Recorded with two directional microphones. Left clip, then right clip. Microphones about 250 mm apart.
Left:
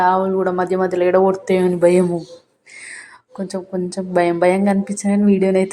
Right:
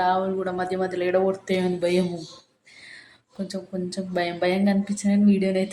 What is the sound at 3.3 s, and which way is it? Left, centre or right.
Speech, centre.